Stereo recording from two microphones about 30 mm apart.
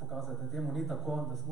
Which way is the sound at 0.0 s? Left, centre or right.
Centre.